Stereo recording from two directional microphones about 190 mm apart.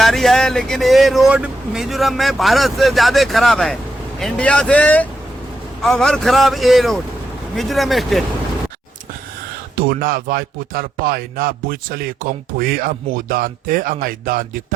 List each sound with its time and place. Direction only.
0.0 s speech: centre (ahead or behind)
9.7 s speech: 50° right (ahead or behind)